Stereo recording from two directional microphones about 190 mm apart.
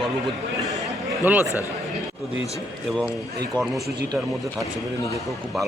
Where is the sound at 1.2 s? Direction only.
10° right (ahead or behind).